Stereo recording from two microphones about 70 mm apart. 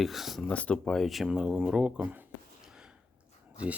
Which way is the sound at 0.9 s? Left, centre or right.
Centre.